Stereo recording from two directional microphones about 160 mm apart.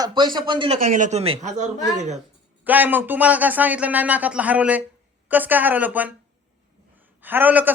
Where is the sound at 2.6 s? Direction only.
10° right (ahead or behind).